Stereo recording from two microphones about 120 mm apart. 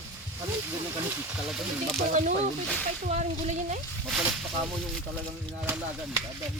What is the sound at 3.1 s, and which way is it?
Speech, 75° right (ahead or behind).